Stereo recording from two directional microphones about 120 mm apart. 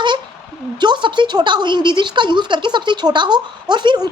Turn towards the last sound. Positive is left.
turn(degrees=-35)  # may be behind; listen again after turning